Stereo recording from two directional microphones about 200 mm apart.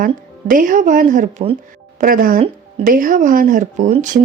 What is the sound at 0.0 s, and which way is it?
Speech, 40° right (ahead or behind).